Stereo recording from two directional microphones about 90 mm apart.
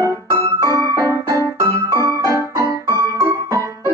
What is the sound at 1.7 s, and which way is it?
Music, 35° right (ahead or behind).